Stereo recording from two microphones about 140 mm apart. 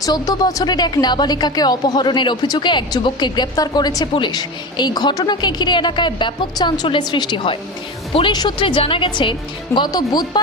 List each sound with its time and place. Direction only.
0.0 s speech: 25° left (ahead or behind)